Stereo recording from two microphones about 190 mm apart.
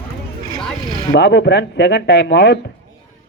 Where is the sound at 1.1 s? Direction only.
65° left (ahead or behind).